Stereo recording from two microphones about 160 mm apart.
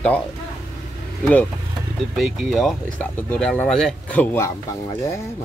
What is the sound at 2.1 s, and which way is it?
Speech, centre (ahead or behind).